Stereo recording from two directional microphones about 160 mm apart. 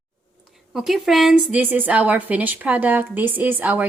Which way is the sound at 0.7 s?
Centre (ahead or behind).